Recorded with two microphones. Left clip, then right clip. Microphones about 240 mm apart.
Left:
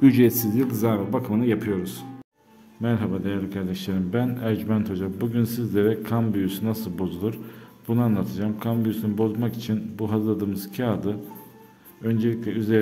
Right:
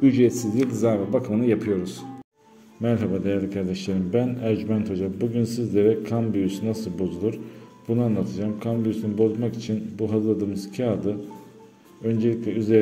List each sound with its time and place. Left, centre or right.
0.0 s a man's voice: left